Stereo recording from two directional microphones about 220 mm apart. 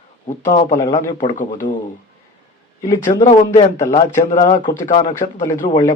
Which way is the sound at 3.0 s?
35° left (ahead or behind).